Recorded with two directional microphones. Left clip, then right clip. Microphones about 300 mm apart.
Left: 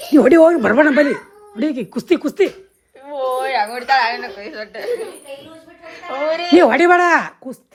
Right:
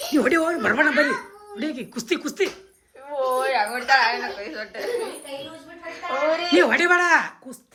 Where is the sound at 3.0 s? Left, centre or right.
Left.